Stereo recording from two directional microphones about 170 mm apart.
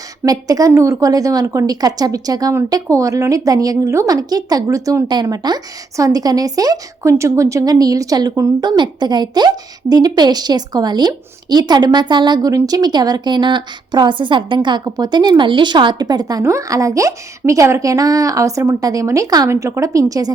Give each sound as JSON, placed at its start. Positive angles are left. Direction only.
{"t": 0.3, "sound": "a woman's voice", "side_deg": -20}